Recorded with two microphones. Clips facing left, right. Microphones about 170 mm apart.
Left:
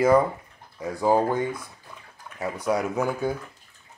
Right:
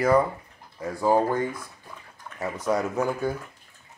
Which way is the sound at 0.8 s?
5° left (ahead or behind).